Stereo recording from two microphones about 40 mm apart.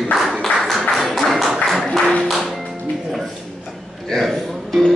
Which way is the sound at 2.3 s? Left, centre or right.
Centre.